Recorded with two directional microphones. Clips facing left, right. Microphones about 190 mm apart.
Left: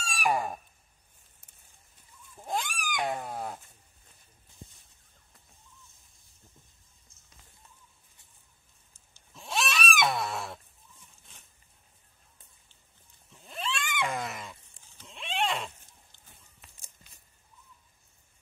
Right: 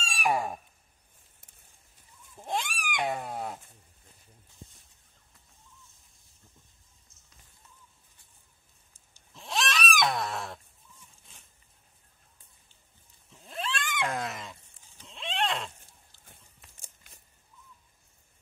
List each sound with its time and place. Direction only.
0.1 s fowl: 5° right (ahead or behind)
2.3 s a sound: centre (ahead or behind)
9.3 s goat: centre (ahead or behind)
13.5 s cat: centre (ahead or behind)
15.0 s horse: centre (ahead or behind)
16.8 s a sound: 50° right (ahead or behind)